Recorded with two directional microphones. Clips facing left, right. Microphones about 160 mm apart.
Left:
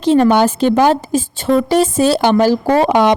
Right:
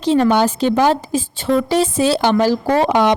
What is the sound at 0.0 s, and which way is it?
A woman's voice, 55° left (ahead or behind).